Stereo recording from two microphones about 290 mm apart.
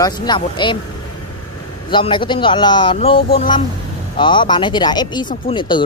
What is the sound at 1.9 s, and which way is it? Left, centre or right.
Speech, centre.